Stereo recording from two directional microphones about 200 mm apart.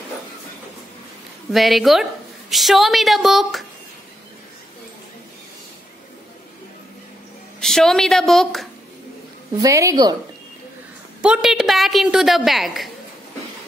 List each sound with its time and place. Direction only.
1.5 s a woman's voice: centre (ahead or behind)
7.6 s a woman's voice: centre (ahead or behind)
9.6 s a woman's voice: 15° right (ahead or behind)
11.1 s a woman's voice: 5° right (ahead or behind)